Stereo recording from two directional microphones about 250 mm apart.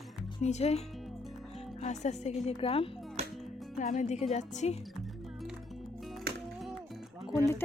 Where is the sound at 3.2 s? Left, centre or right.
Right.